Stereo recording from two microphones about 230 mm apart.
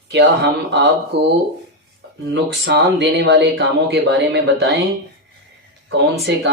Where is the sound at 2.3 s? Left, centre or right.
Right.